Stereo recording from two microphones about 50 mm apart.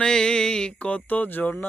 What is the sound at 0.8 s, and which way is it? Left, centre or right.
Speech, left.